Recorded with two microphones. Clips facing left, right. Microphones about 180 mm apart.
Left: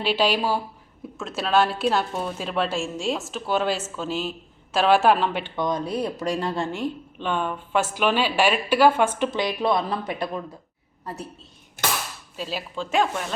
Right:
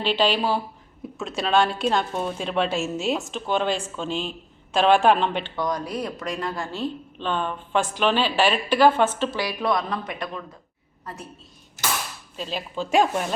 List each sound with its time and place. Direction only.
0.0 s a woman's voice: 10° left (ahead or behind)
5.5 s speech: 25° left (ahead or behind)
6.7 s speech: 15° left (ahead or behind)
12.4 s speech: 5° left (ahead or behind)
12.7 s speech: 10° right (ahead or behind)